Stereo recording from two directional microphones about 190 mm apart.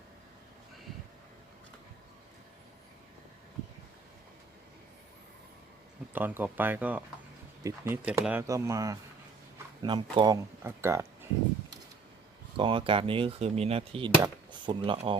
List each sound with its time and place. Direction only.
6.1 s speech: 10° right (ahead or behind)
12.5 s speech: 25° right (ahead or behind)